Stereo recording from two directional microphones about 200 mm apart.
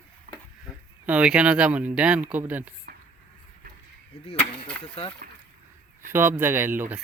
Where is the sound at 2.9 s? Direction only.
50° right (ahead or behind).